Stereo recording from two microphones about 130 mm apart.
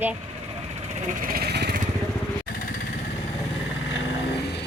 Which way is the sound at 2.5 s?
90° left.